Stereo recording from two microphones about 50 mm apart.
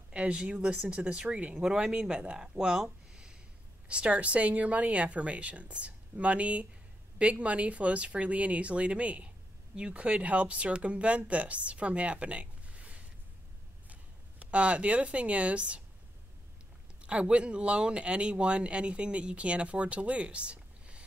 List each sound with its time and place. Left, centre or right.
0.1 s speech: right
14.4 s speech: right
17.0 s speech: right